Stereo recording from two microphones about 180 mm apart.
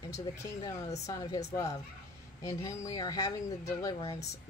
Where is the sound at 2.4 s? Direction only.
20° left (ahead or behind).